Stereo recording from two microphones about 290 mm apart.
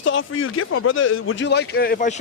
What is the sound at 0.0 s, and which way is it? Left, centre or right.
Speech, left.